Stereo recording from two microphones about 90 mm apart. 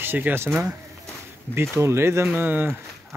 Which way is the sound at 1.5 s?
30° right (ahead or behind).